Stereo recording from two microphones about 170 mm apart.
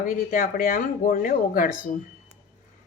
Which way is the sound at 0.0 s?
55° left (ahead or behind).